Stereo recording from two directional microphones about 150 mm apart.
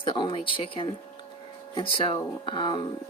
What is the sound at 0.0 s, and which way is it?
Speech, 35° left (ahead or behind).